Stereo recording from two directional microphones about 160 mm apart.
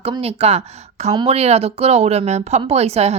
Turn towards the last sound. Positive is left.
turn(degrees=-40)  # may be behind; listen again after turning